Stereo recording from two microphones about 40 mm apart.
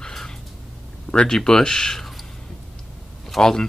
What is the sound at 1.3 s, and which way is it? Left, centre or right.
Speech, centre.